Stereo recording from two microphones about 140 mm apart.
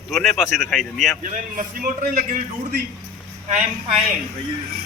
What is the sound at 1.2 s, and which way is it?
A man's voice, 65° right (ahead or behind).